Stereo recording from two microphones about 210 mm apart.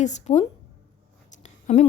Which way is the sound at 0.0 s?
35° left (ahead or behind).